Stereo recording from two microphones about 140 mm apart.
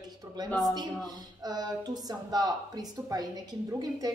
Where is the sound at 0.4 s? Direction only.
30° right (ahead or behind).